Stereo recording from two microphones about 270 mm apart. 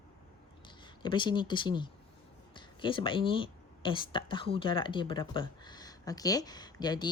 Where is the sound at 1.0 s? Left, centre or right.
Centre.